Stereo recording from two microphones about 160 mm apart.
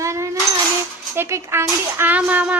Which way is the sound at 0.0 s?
20° right (ahead or behind).